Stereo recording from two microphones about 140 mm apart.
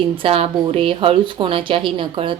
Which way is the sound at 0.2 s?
40° right (ahead or behind).